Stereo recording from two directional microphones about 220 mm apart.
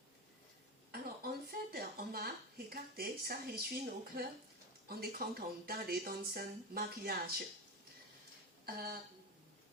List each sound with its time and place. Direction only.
0.9 s a sound: 45° right (ahead or behind)
4.9 s speech: 45° right (ahead or behind)
8.6 s speech: 45° right (ahead or behind)